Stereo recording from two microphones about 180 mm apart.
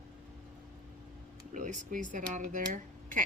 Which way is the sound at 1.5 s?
45° right (ahead or behind).